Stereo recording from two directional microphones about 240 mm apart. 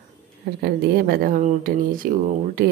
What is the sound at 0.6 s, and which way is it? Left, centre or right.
Speech, right.